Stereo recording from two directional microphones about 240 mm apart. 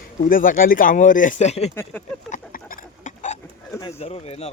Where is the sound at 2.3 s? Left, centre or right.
Left.